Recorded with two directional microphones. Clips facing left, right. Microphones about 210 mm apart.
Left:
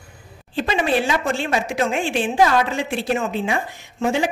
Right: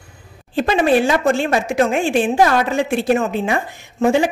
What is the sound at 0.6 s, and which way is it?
A woman's voice, 45° right (ahead or behind).